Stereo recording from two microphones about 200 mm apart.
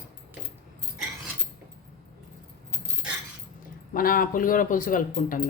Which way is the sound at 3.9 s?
45° left (ahead or behind).